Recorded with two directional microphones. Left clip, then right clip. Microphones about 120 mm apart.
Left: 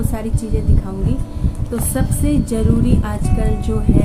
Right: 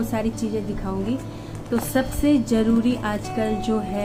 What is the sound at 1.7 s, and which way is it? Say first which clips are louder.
Speech: even; 20° left (ahead or behind).